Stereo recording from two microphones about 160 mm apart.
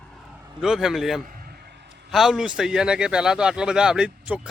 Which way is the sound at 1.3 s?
70° right (ahead or behind).